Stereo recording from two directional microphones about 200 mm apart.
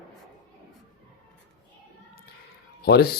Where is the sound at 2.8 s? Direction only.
55° left (ahead or behind).